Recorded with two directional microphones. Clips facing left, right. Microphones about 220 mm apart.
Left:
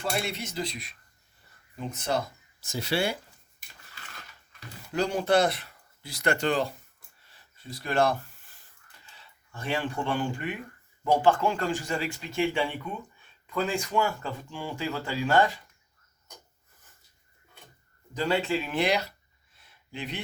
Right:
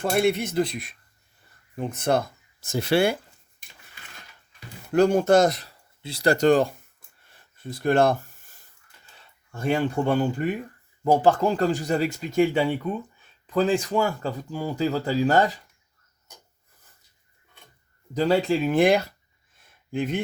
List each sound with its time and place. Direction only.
0.0 s speech: 55° right (ahead or behind)
4.9 s speech: 50° right (ahead or behind)
6.0 s speech: 30° right (ahead or behind); by 6.7 s 45° right (ahead or behind)
7.3 s a sound: 50° right (ahead or behind)
9.0 s speech: 45° right (ahead or behind)
18.1 s speech: 40° right (ahead or behind)
19.5 s a sound: 50° right (ahead or behind)